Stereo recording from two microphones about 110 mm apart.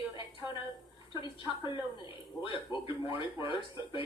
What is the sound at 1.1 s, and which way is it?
Speech, 45° left (ahead or behind).